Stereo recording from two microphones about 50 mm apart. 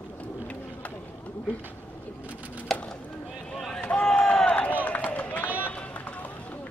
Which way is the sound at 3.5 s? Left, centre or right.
Centre.